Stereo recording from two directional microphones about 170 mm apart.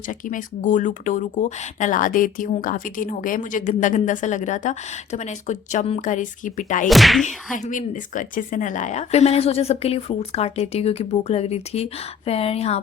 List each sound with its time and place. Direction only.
0.1 s speech: 50° left (ahead or behind)
6.8 s a sound: centre (ahead or behind)
7.3 s speech: 50° left (ahead or behind)